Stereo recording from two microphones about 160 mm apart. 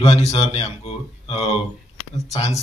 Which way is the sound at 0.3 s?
35° left (ahead or behind).